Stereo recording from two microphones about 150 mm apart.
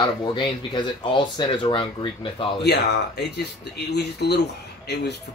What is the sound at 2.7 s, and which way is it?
Speech, 90° left.